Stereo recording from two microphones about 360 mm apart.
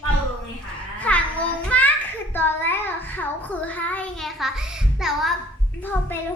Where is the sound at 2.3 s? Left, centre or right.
Centre.